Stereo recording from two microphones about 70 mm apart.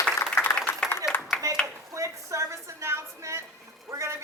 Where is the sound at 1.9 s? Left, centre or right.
Right.